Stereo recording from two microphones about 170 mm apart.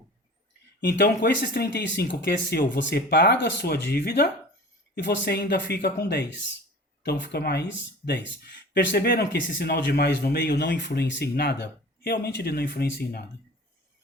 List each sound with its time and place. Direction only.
0.8 s speech: 65° left (ahead or behind)
4.9 s speech: 85° left; by 7.6 s 70° left (ahead or behind)
8.7 s speech: 80° left